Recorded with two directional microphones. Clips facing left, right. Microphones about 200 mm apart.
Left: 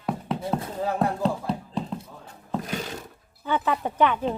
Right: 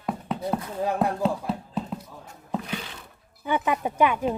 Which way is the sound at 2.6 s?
45° left (ahead or behind).